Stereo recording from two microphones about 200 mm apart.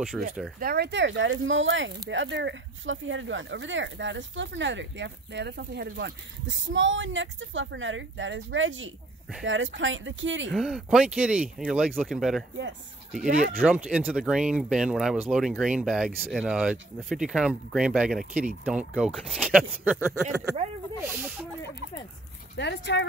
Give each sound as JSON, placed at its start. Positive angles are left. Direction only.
{"t": 0.2, "sound": "speech", "side_deg": 0}
{"t": 0.6, "sound": "speech", "side_deg": -50}
{"t": 10.5, "sound": "speech", "side_deg": 0}
{"t": 13.6, "sound": "speech", "side_deg": -5}
{"t": 22.6, "sound": "speech", "side_deg": 60}